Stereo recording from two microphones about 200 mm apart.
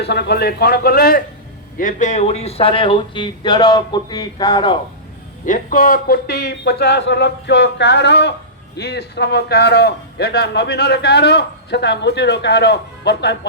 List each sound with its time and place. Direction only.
0.0 s a man's voice: 55° left (ahead or behind)
1.8 s speech: 40° left (ahead or behind); by 4.8 s 20° left (ahead or behind)
5.5 s a man's voice: 40° left (ahead or behind); by 13.5 s 60° left (ahead or behind)